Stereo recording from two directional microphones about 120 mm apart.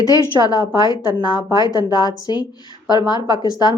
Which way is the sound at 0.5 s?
35° left (ahead or behind).